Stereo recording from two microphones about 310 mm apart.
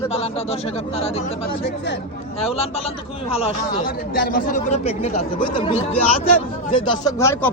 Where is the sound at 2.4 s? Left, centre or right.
Centre.